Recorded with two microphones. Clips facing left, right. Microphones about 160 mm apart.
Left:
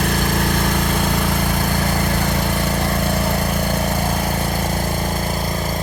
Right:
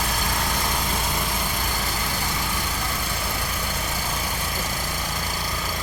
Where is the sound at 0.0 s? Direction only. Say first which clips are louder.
Left 8 dB; 60° left (ahead or behind).